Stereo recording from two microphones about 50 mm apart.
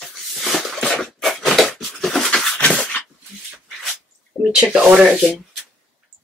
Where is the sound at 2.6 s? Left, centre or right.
Centre.